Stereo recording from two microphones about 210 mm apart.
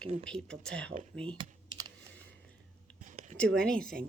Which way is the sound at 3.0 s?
35° right (ahead or behind).